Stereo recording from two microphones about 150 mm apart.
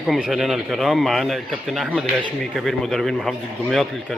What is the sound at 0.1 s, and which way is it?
A man's voice, 5° right (ahead or behind).